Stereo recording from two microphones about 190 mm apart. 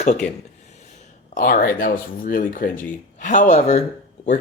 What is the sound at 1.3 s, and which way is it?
Speech, 45° left (ahead or behind).